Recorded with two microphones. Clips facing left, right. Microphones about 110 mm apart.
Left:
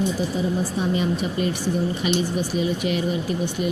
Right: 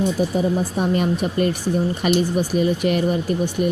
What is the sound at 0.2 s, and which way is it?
Speech, 55° right (ahead or behind).